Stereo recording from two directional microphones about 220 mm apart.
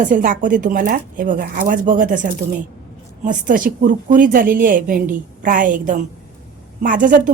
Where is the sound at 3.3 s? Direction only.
35° right (ahead or behind).